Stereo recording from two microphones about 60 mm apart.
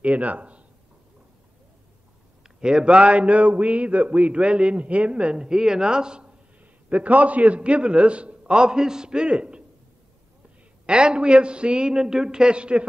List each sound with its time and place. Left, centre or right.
0.0 s speech: right
2.4 s a man's voice: centre
10.9 s a man's voice: centre